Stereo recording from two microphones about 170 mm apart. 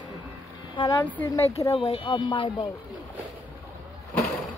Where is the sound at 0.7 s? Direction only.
25° left (ahead or behind).